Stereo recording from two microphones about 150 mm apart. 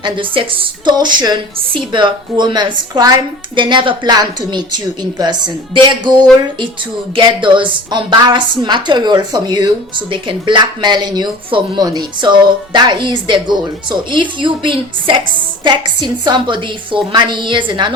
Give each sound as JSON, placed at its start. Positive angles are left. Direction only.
{"t": 0.0, "sound": "a woman's voice", "side_deg": -35}